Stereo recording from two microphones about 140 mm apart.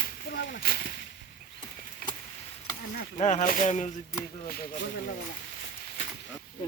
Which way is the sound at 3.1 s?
55° left (ahead or behind).